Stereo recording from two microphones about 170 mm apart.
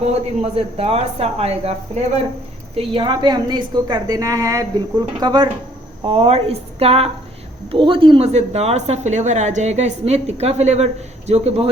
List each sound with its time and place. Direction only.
0.0 s a woman's voice: 35° right (ahead or behind)